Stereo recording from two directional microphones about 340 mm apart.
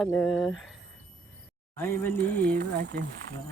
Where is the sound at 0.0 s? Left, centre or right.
Centre.